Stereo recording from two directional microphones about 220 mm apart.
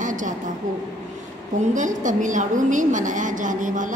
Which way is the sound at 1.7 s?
35° right (ahead or behind).